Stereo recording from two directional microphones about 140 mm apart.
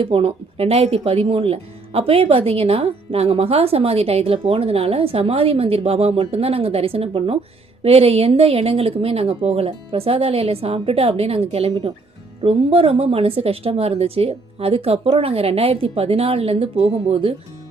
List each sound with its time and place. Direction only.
0.0 s speech: 40° right (ahead or behind)